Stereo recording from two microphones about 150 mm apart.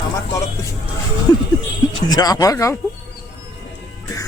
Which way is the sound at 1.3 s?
30° left (ahead or behind).